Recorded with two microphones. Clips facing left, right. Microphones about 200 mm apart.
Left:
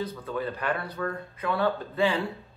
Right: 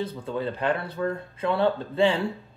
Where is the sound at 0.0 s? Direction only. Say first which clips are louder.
Right 2 dB; 25° right (ahead or behind).